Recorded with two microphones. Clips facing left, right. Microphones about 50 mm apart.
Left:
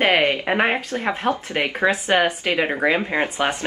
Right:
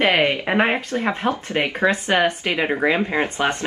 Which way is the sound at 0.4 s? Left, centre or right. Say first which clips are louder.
Right 1 dB; centre.